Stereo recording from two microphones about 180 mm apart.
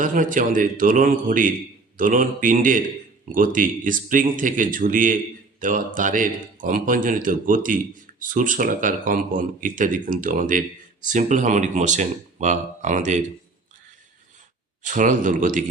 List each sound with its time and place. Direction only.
0.0 s speech: 45° right (ahead or behind)
14.8 s speech: 45° right (ahead or behind)